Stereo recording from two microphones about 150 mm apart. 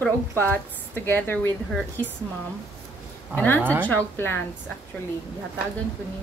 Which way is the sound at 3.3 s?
15° left (ahead or behind).